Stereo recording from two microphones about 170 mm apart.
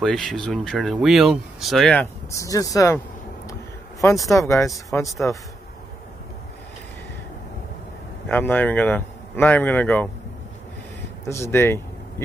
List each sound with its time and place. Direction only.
0.0 s speech: centre (ahead or behind)
2.3 s speech: 20° left (ahead or behind)
4.3 s speech: 15° left (ahead or behind)
8.3 s speech: 10° left (ahead or behind)
11.2 s speech: 15° left (ahead or behind)